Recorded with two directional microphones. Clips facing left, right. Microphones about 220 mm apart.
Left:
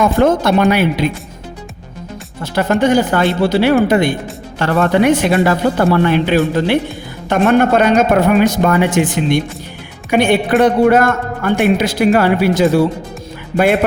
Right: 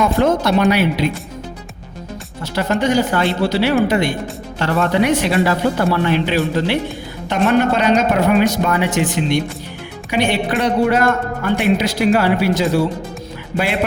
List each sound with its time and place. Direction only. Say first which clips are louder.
0.0 s speech: left 3 dB; 50° left (ahead or behind)
2.4 s speech: left 4 dB; 55° left (ahead or behind)